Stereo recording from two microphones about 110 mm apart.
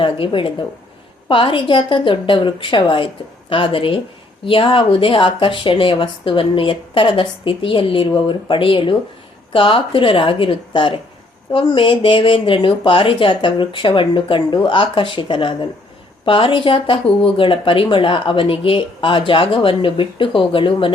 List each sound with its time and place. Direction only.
0.0 s speech: 50° left (ahead or behind)